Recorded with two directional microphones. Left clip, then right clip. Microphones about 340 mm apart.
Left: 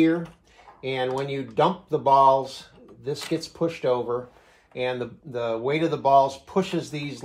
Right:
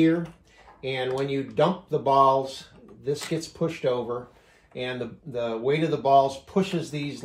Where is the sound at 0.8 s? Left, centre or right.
Centre.